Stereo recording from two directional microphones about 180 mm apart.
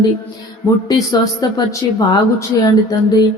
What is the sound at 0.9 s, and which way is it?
A woman's voice, 20° left (ahead or behind).